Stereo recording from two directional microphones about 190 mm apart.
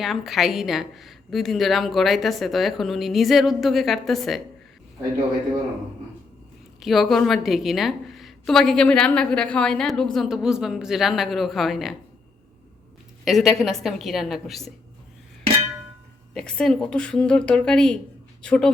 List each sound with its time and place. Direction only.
0.0 s a woman's voice: centre (ahead or behind)
6.7 s a woman's voice: centre (ahead or behind)
13.2 s a woman's voice: centre (ahead or behind)
16.3 s a woman's voice: 5° left (ahead or behind)